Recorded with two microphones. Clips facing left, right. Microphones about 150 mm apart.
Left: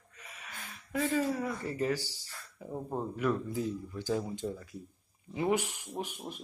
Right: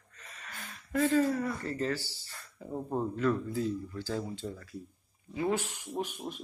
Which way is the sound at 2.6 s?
10° left (ahead or behind).